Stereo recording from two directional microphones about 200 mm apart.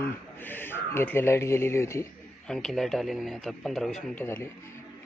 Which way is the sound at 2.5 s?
Centre (ahead or behind).